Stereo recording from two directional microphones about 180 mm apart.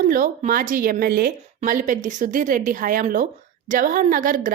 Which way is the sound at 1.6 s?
45° right (ahead or behind).